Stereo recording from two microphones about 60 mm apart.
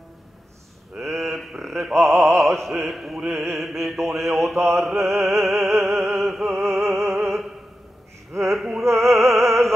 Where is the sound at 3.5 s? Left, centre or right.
Centre.